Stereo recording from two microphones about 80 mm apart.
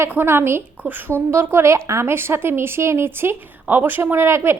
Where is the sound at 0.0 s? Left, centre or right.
Right.